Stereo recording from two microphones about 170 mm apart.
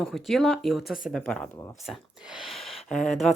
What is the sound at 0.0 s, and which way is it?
Speech, centre (ahead or behind).